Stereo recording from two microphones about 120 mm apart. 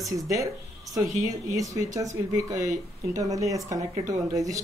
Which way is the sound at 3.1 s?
30° right (ahead or behind).